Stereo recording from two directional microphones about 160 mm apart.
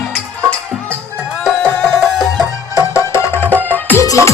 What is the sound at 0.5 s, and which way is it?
Music, 5° left (ahead or behind).